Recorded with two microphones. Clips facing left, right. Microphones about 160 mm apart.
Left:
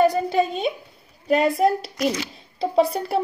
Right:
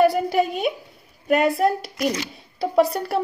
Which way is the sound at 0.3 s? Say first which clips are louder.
Even; 10° right (ahead or behind).